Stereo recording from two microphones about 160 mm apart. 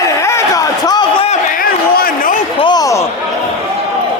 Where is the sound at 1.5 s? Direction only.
65° left (ahead or behind).